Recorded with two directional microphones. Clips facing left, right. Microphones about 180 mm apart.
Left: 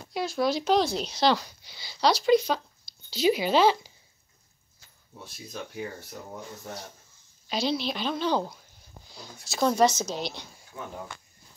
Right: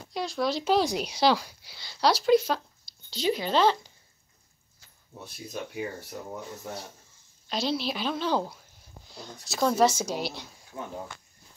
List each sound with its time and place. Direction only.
0.1 s speech: centre (ahead or behind)
5.5 s speech: 5° right (ahead or behind)
7.4 s speech: centre (ahead or behind)
10.7 s speech: 25° right (ahead or behind)